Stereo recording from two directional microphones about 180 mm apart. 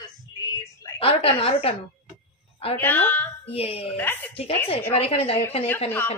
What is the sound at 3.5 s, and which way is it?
Speech, 35° left (ahead or behind).